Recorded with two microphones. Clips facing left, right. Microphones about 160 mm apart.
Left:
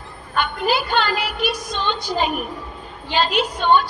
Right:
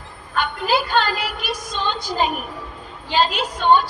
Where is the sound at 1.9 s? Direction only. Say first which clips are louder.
Even; 40° right (ahead or behind).